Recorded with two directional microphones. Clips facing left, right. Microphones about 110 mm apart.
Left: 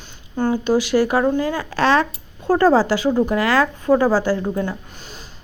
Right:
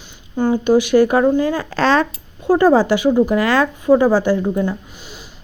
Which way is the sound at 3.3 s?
25° right (ahead or behind).